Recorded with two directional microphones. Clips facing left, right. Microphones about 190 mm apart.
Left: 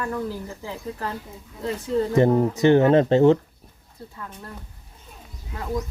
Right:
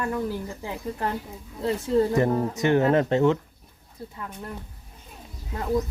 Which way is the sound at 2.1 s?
25° left (ahead or behind).